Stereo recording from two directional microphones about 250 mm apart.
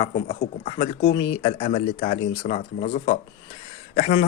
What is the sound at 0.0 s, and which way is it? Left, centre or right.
A man's voice, left.